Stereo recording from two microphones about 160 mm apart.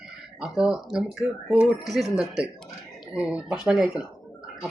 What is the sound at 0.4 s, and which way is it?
A man's voice, 5° right (ahead or behind).